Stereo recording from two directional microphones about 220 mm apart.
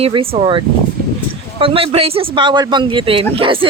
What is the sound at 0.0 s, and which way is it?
Speech, 25° right (ahead or behind).